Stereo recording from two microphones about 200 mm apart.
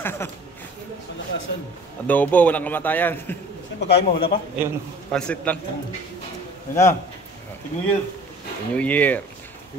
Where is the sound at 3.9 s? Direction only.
55° left (ahead or behind).